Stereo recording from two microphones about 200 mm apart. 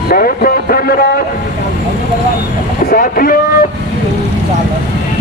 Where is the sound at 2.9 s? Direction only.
45° left (ahead or behind).